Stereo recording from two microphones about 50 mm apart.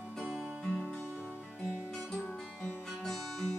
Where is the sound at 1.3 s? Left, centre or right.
Centre.